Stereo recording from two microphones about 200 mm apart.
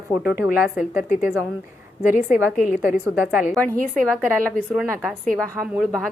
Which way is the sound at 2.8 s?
10° right (ahead or behind).